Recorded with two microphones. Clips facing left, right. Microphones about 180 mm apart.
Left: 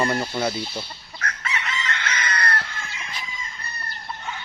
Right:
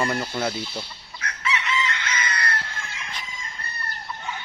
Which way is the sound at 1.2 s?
45° left (ahead or behind).